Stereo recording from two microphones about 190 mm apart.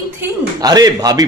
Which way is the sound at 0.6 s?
20° right (ahead or behind).